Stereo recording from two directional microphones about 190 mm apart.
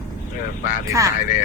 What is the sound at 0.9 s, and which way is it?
Speech, 15° right (ahead or behind).